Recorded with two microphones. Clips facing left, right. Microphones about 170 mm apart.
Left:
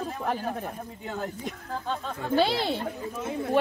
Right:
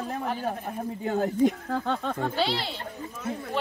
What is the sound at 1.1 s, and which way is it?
Speech, 45° right (ahead or behind).